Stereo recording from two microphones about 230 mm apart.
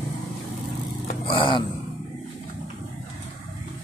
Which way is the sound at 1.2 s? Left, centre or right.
Left.